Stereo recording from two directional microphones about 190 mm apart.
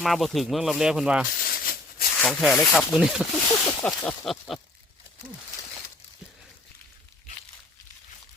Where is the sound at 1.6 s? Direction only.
55° left (ahead or behind).